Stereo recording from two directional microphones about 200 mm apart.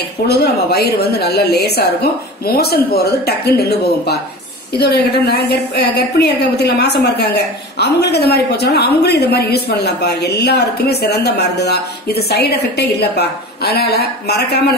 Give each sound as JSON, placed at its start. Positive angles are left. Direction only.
{"t": 0.3, "sound": "a woman's voice", "side_deg": 55}